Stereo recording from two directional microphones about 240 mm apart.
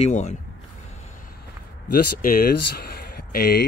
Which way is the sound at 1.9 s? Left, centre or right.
Left.